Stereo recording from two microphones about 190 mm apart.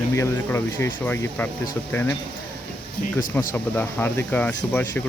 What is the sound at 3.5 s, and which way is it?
Speech, 10° left (ahead or behind).